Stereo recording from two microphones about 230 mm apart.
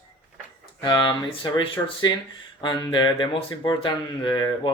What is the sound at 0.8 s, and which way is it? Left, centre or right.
Speech, left.